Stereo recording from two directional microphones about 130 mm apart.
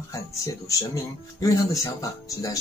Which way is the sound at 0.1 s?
25° left (ahead or behind).